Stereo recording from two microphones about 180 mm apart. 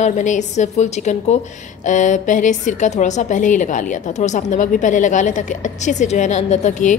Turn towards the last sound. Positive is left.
turn(degrees=40)  # may be behind; listen again after turning